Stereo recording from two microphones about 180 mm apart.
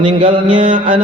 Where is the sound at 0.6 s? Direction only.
45° right (ahead or behind).